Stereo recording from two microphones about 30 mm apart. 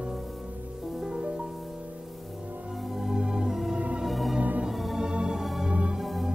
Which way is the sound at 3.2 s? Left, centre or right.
Right.